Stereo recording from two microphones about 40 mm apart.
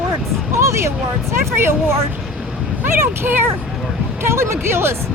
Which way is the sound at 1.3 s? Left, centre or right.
Right.